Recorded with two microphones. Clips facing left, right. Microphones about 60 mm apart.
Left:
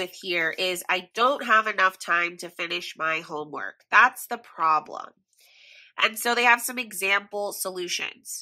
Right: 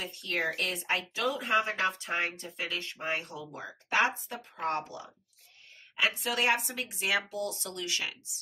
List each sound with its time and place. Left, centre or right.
0.0 s a woman's voice: left